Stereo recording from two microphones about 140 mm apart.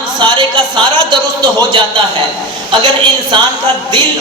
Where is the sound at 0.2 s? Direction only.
35° right (ahead or behind).